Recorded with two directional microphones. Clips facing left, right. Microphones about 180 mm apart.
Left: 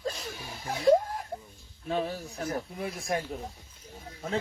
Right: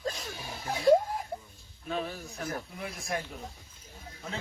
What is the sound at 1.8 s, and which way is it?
Speech, 35° left (ahead or behind).